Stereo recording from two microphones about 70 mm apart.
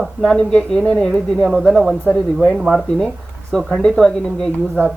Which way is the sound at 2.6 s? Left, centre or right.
Centre.